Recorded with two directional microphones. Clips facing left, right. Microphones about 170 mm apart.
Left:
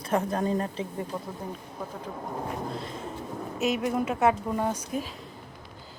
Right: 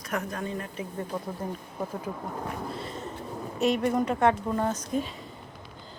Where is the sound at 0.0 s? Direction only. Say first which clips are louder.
Left 6 dB; 30° left (ahead or behind).